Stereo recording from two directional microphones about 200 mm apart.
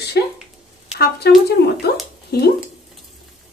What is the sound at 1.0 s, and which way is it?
Speech, 55° left (ahead or behind).